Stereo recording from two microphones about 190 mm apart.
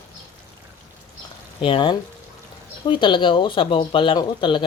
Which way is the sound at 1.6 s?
25° left (ahead or behind).